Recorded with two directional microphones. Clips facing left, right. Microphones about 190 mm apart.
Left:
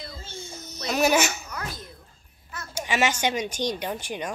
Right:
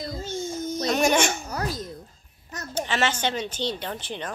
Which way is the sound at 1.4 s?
40° right (ahead or behind).